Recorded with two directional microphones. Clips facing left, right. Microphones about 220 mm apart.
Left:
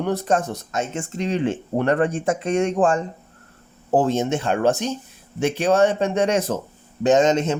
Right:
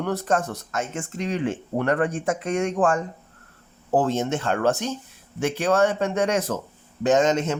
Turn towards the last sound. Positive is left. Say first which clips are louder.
# left 3 dB
turn(degrees=20)  # may be behind; listen again after turning